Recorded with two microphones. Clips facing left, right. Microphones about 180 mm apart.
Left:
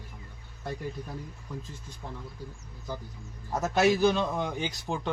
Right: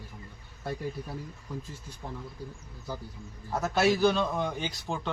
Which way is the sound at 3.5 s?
20° left (ahead or behind).